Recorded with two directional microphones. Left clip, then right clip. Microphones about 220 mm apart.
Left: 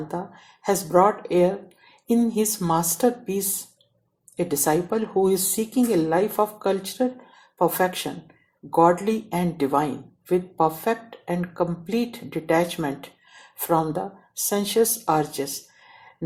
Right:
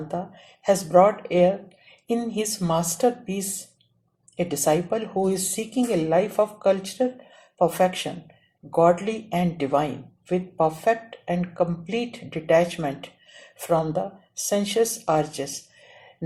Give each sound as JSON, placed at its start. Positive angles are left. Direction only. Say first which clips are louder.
{"t": 0.6, "sound": "speech", "louder": "right 2 dB", "side_deg": 30}